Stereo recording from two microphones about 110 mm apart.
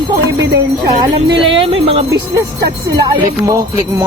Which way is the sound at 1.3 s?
50° right (ahead or behind).